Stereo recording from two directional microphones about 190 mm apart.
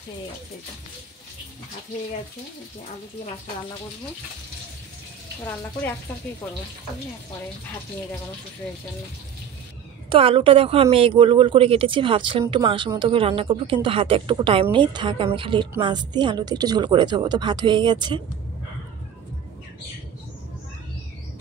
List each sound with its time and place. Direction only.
10.0 s speech: 30° right (ahead or behind)